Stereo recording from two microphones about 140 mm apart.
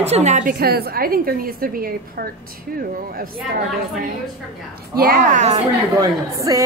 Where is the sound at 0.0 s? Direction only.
50° right (ahead or behind).